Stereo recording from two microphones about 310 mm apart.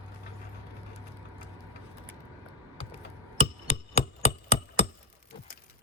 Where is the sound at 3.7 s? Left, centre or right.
Left.